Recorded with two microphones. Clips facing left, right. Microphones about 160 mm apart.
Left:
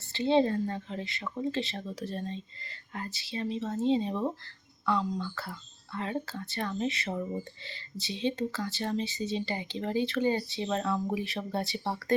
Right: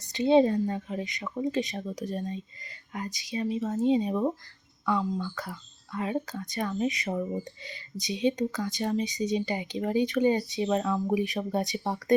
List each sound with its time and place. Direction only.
0.0 s speech: 15° right (ahead or behind)